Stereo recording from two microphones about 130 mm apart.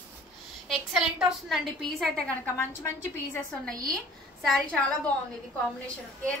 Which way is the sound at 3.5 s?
5° left (ahead or behind).